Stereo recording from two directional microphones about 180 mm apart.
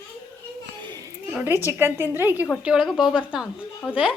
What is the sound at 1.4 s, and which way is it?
A woman's voice, 10° right (ahead or behind).